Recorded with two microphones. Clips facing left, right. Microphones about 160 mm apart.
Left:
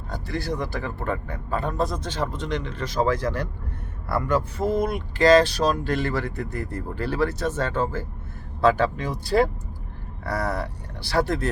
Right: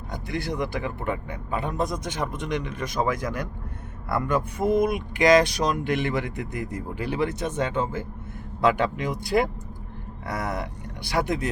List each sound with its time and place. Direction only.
0.1 s speech: 20° right (ahead or behind)